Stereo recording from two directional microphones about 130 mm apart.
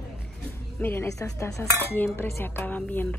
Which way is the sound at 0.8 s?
15° left (ahead or behind).